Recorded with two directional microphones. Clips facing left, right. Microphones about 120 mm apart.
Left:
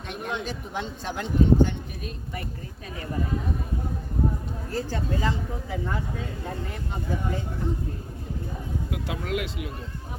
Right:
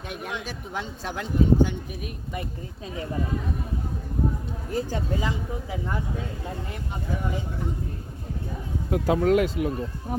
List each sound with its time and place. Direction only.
0.1 s speech: 5° right (ahead or behind)
4.7 s speech: 15° right (ahead or behind)
8.9 s speech: 40° right (ahead or behind)